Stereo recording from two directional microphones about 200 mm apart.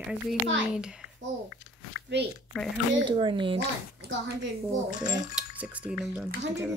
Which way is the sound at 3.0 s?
25° right (ahead or behind).